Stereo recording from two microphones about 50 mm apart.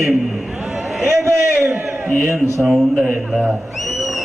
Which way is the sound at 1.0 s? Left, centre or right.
Right.